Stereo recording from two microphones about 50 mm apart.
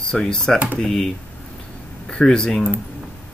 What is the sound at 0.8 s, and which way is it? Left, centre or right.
Speech, centre.